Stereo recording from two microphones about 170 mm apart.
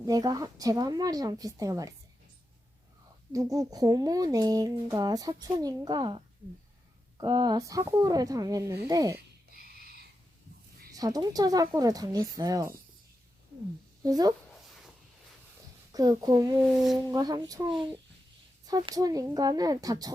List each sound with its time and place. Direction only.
0.0 s speech: 20° right (ahead or behind)
3.3 s speech: 20° right (ahead or behind)
9.1 s a sound: 60° right (ahead or behind)
10.9 s speech: 20° right (ahead or behind)
14.0 s speech: 20° right (ahead or behind)
15.9 s speech: 20° right (ahead or behind)
16.6 s speech: centre (ahead or behind)
17.1 s speech: 20° right (ahead or behind)